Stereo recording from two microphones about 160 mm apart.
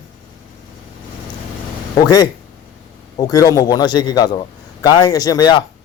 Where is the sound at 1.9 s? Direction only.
25° left (ahead or behind).